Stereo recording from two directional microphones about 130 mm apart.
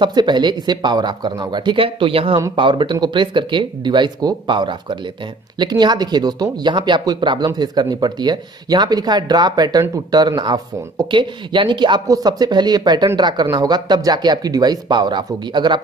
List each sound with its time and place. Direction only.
0.0 s speech: 35° right (ahead or behind)